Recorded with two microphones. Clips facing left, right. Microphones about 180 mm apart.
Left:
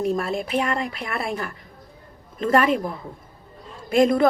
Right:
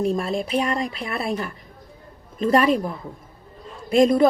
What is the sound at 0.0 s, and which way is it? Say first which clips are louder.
A woman's voice: right 1 dB; 25° right (ahead or behind).